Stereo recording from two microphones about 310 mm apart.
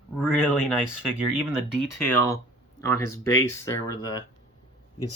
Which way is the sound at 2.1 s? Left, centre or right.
Centre.